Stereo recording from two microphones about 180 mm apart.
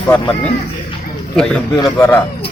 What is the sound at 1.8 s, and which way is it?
Speech, 15° left (ahead or behind).